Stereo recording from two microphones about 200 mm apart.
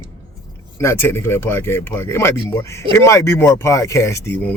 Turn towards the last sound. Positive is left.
turn(degrees=10)  # may be behind; listen again after turning